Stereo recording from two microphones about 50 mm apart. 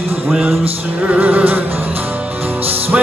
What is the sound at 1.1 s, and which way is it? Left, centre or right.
Music, right.